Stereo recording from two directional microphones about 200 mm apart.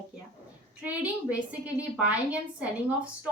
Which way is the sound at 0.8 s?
5° right (ahead or behind).